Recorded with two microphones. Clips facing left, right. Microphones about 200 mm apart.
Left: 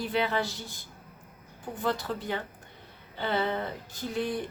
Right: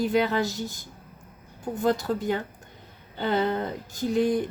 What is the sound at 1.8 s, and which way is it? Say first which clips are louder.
A woman's voice: right 6 dB; 45° right (ahead or behind).